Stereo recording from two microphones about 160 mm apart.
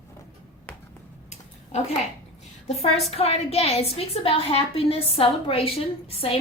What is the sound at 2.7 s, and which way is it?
A woman's voice, 40° left (ahead or behind).